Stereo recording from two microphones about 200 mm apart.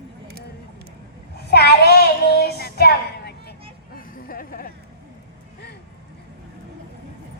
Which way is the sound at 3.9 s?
45° left (ahead or behind).